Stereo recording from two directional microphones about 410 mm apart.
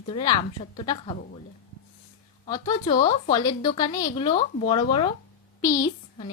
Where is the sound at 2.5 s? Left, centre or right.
Centre.